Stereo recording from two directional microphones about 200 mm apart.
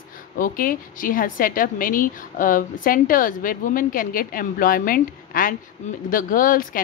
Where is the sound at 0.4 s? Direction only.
45° left (ahead or behind).